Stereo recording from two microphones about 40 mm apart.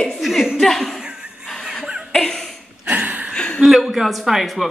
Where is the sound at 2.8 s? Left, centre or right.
Right.